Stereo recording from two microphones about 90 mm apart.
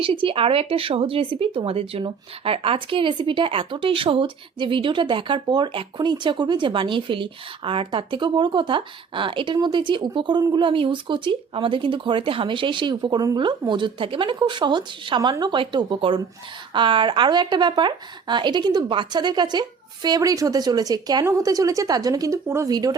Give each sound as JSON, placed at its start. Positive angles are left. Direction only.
{"t": 0.0, "sound": "speech", "side_deg": -75}
{"t": 10.5, "sound": "a woman's voice", "side_deg": -65}
{"t": 22.4, "sound": "a woman's voice", "side_deg": -30}
{"t": 22.7, "sound": "speech", "side_deg": -45}